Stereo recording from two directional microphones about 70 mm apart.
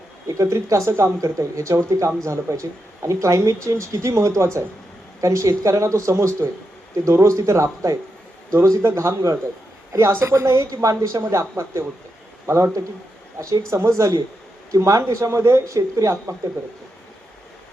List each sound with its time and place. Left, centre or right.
0.3 s speech: right